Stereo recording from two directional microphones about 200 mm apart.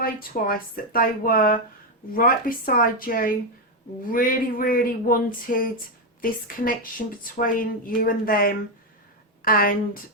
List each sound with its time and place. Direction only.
0.0 s a woman's voice: 45° left (ahead or behind)